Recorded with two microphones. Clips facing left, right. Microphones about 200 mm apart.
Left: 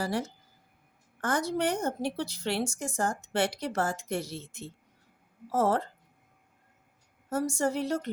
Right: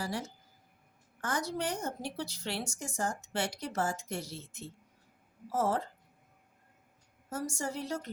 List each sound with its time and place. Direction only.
0.0 s a woman's voice: 60° left (ahead or behind)
5.5 s a woman's voice: 65° left (ahead or behind)
7.3 s a woman's voice: 60° left (ahead or behind)